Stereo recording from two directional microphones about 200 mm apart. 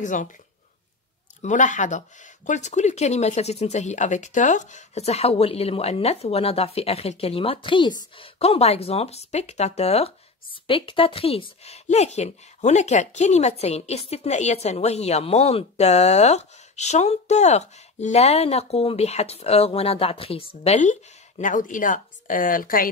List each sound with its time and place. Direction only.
0.0 s speech: 40° left (ahead or behind)
1.4 s speech: 40° left (ahead or behind)